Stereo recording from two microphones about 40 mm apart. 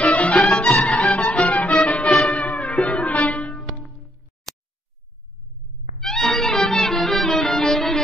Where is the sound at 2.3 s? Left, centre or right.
Left.